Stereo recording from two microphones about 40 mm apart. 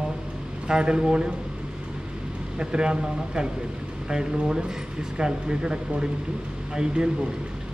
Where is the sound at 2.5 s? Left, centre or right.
Centre.